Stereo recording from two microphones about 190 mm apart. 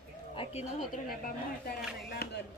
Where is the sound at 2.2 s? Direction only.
55° left (ahead or behind).